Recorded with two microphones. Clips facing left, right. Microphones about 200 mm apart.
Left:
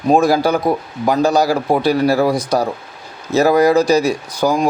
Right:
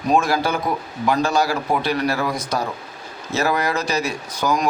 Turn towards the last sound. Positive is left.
turn(degrees=30)  # may be behind; listen again after turning